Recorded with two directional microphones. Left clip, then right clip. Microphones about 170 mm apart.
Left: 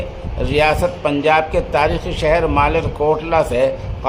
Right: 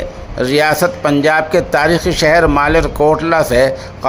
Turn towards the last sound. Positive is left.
turn(degrees=-30)  # may be behind; listen again after turning